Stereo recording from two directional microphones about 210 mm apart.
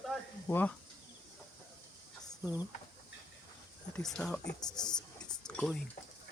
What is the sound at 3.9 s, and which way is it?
Speech, 5° left (ahead or behind).